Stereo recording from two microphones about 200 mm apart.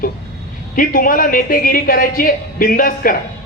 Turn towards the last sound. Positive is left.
turn(degrees=45)  # may be behind; listen again after turning